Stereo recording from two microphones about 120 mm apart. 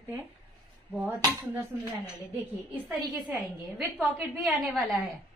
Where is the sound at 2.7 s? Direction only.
15° right (ahead or behind).